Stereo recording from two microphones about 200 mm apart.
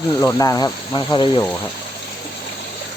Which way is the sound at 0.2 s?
15° left (ahead or behind).